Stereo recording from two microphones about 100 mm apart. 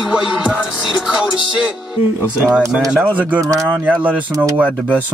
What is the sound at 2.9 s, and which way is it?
Music, 10° right (ahead or behind).